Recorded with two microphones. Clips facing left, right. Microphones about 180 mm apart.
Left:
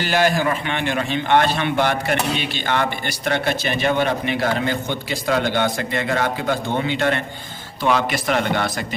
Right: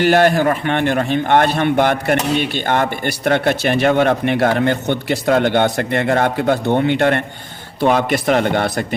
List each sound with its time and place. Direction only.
0.0 s a man's voice: 60° right (ahead or behind)